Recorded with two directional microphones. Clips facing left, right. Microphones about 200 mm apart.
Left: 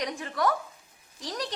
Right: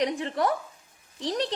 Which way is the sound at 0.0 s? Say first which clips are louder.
Right 3 dB; 30° right (ahead or behind).